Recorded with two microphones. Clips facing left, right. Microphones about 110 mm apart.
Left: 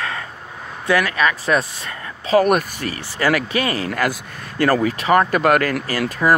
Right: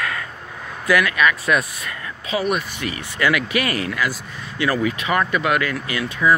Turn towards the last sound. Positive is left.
turn(degrees=40)  # may be behind; listen again after turning